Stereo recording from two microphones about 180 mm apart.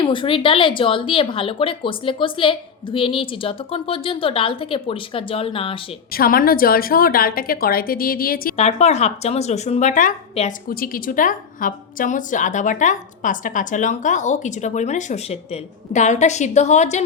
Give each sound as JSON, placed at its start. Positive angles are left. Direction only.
{"t": 0.0, "sound": "a woman's voice", "side_deg": 25}
{"t": 6.1, "sound": "a woman's voice", "side_deg": 55}
{"t": 8.5, "sound": "speech", "side_deg": 35}
{"t": 10.7, "sound": "a woman's voice", "side_deg": 55}